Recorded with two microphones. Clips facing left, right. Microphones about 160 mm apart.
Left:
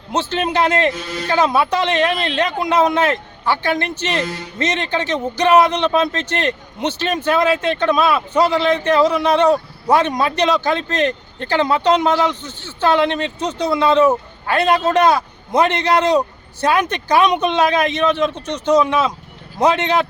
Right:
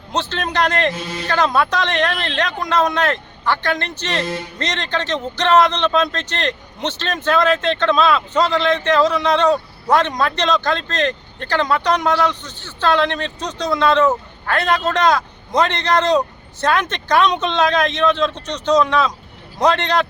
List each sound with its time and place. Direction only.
0.1 s a man's voice: 15° left (ahead or behind)
18.3 s speech: 20° right (ahead or behind)
18.6 s a man's voice: 20° left (ahead or behind)